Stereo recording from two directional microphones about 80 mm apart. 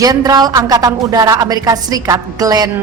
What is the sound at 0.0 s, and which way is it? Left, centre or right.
Music, right.